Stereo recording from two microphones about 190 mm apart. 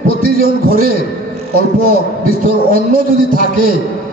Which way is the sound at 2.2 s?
50° right (ahead or behind).